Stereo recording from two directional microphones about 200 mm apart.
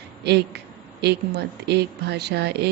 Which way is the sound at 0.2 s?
55° right (ahead or behind).